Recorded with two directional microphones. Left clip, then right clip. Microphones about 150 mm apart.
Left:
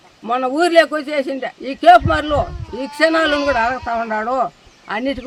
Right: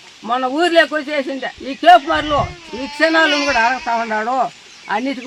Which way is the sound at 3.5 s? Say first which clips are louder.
Right 2 dB; 10° left (ahead or behind).